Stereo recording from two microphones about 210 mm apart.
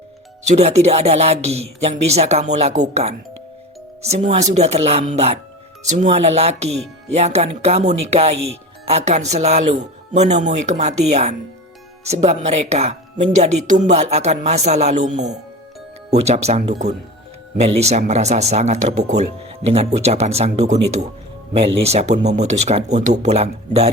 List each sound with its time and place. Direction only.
0.4 s speech: 30° right (ahead or behind)